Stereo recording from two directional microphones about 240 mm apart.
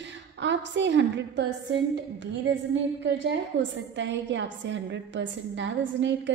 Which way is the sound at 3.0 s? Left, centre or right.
Right.